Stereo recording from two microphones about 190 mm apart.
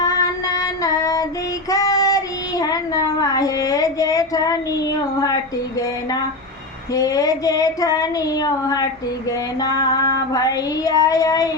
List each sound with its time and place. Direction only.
0.0 s female singing: 20° left (ahead or behind)
1.7 s child singing: 15° left (ahead or behind)
6.9 s child singing: 20° left (ahead or behind)